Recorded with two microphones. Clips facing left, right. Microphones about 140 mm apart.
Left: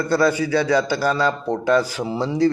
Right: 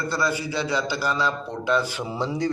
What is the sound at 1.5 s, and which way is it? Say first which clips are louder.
Speech: left 5 dB; 35° left (ahead or behind).